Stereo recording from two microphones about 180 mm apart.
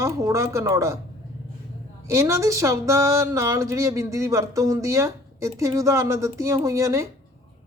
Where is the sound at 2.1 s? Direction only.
15° right (ahead or behind).